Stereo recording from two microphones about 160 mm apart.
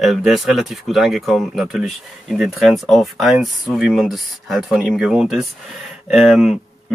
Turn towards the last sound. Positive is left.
turn(degrees=0)  # may be behind; listen again after turning